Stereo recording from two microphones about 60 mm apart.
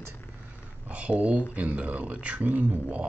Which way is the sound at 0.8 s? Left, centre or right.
Right.